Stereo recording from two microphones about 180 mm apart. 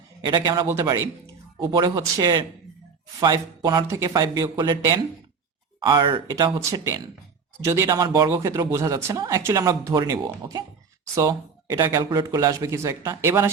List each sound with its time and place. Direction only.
0.3 s speech: 25° right (ahead or behind)